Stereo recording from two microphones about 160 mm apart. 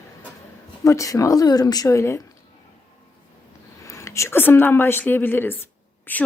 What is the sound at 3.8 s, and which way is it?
A woman's voice, 20° left (ahead or behind).